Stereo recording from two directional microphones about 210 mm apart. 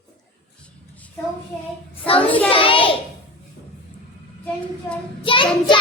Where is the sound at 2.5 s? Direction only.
25° left (ahead or behind).